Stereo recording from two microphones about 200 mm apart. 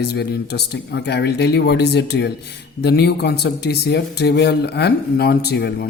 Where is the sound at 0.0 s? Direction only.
55° left (ahead or behind).